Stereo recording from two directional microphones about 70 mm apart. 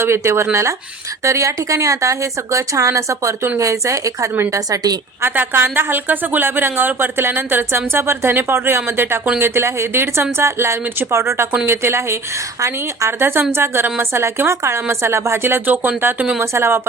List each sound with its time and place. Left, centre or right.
0.0 s a woman's voice: right
5.2 s a woman's voice: right
16.4 s a woman's voice: right